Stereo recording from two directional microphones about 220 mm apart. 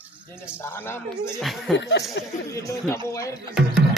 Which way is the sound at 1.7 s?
55° left (ahead or behind).